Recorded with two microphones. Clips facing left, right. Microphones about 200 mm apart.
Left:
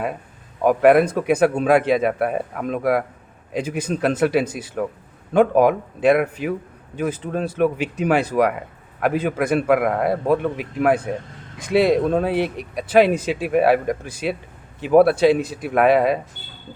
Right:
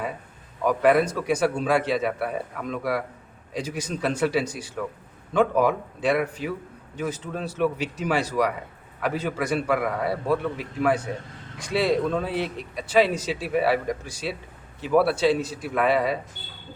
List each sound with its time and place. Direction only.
0.6 s a man's voice: 55° left (ahead or behind)